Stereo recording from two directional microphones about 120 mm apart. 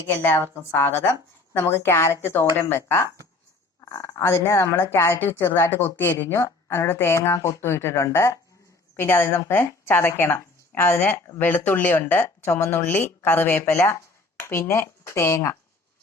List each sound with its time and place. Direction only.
0.1 s a woman's voice: 20° left (ahead or behind)